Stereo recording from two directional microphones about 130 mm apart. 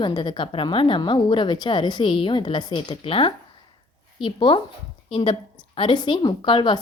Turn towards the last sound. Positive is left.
turn(degrees=40)  # may be behind; listen again after turning